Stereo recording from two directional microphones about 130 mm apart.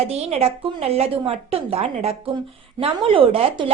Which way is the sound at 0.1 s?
55° right (ahead or behind).